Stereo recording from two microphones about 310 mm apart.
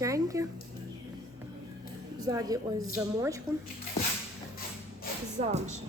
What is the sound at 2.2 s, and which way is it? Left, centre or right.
A woman's voice, centre.